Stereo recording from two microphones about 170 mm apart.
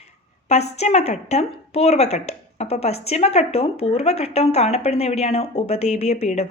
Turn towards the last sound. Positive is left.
turn(degrees=40)  # may be behind; listen again after turning